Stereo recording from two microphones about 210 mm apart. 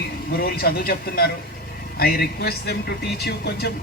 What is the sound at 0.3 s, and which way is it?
Speech, 45° left (ahead or behind).